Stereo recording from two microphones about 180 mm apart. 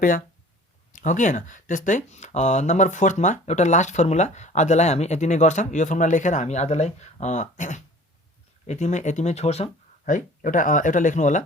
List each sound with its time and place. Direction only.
0.9 s speech: 45° left (ahead or behind)